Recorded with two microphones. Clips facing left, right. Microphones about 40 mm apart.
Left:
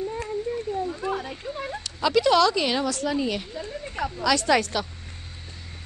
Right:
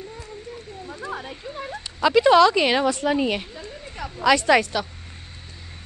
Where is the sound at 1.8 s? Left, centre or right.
Centre.